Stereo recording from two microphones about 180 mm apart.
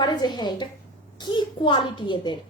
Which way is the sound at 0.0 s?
25° left (ahead or behind).